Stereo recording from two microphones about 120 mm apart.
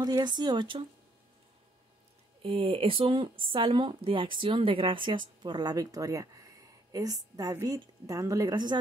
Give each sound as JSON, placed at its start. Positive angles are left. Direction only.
{"t": 0.0, "sound": "speech", "side_deg": -35}
{"t": 2.4, "sound": "speech", "side_deg": -50}